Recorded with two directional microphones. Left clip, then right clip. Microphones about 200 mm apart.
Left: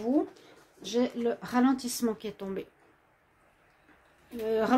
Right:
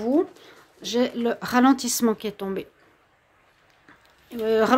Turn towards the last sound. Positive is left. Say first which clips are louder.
# right 7 dB
turn(degrees=-35)  # may be behind; listen again after turning